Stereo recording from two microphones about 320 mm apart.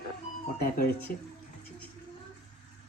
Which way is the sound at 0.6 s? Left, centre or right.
Left.